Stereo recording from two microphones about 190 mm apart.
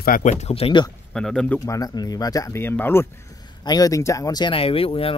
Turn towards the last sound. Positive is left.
turn(degrees=30)  # may be behind; listen again after turning